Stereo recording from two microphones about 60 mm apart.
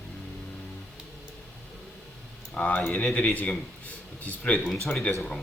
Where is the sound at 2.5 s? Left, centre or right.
Left.